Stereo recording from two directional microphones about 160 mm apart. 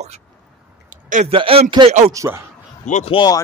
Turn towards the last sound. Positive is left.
turn(degrees=25)  # may be behind; listen again after turning